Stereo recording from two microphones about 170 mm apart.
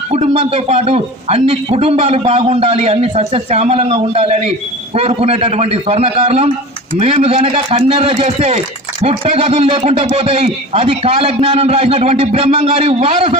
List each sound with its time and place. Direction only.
0.1 s a man's voice: 40° right (ahead or behind)